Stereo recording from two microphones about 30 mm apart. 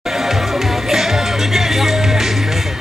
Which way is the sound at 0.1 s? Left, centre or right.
Centre.